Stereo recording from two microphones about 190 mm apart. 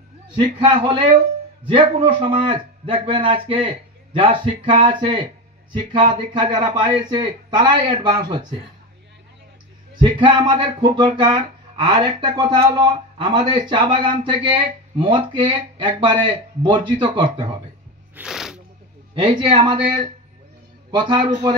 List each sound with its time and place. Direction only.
0.4 s speech: 25° right (ahead or behind)
10.0 s speech: 25° right (ahead or behind)
18.1 s a sound: 5° right (ahead or behind)
19.1 s speech: 25° right (ahead or behind)